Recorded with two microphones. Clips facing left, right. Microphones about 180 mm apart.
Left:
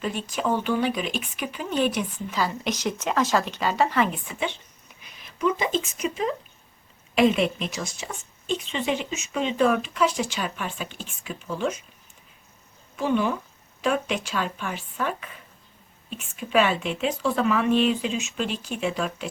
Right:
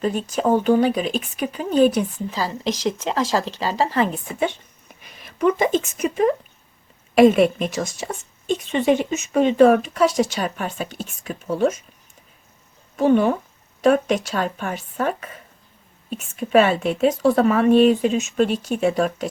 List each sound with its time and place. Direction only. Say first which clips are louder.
0.0 s a woman's voice: right 6 dB; 40° right (ahead or behind)
13.0 s a woman's voice: right 7 dB; 50° right (ahead or behind)
16.4 s a woman's voice: right 6 dB; 45° right (ahead or behind)